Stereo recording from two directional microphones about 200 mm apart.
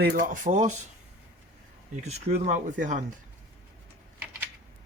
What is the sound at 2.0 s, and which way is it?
Speech, 35° right (ahead or behind).